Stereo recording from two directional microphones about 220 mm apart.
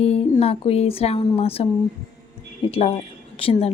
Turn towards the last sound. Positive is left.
turn(degrees=25)  # may be behind; listen again after turning